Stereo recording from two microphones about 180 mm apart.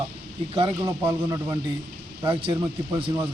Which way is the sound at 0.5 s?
30° right (ahead or behind).